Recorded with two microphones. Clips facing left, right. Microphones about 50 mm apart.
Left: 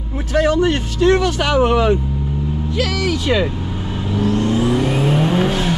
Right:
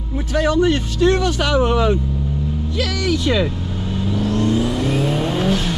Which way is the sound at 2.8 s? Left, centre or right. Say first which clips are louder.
Even; left.